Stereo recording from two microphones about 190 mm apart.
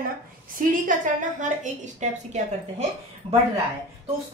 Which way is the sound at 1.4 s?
40° right (ahead or behind).